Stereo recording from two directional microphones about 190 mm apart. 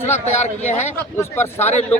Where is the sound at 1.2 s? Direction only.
10° left (ahead or behind).